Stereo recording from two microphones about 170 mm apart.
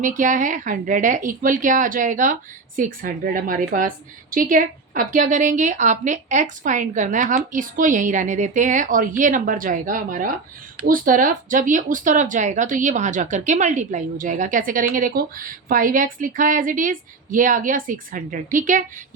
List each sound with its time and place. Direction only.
0.0 s a woman's voice: 50° right (ahead or behind)